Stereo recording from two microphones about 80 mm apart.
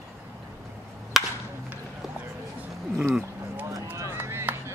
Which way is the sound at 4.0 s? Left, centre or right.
Right.